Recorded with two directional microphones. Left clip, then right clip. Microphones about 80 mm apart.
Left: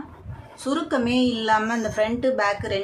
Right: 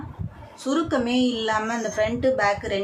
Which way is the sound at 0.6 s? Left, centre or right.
Left.